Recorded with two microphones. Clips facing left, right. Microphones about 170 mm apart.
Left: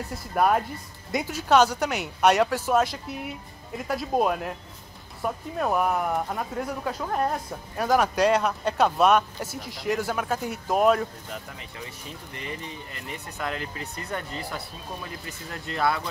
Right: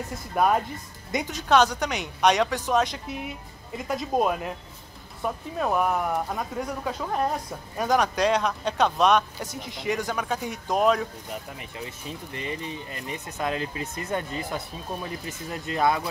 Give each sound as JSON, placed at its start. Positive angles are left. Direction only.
{"t": 0.3, "sound": "speech", "side_deg": 0}
{"t": 12.4, "sound": "speech", "side_deg": -20}